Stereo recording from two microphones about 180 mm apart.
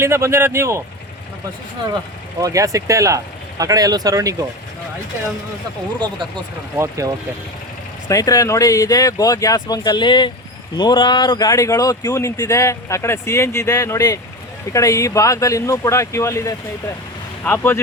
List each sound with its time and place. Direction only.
0.0 s speech: 15° right (ahead or behind)
2.4 s speech: 20° right (ahead or behind)
6.7 s speech: 15° right (ahead or behind)
8.0 s speech: 20° left (ahead or behind)